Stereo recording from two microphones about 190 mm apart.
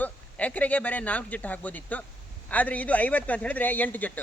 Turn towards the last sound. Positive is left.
turn(degrees=10)  # may be behind; listen again after turning